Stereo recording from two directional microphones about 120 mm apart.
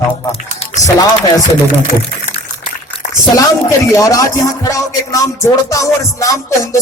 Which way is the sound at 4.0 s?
30° left (ahead or behind).